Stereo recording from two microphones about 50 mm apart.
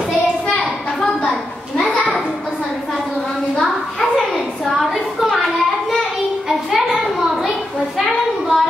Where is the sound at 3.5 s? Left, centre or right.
Centre.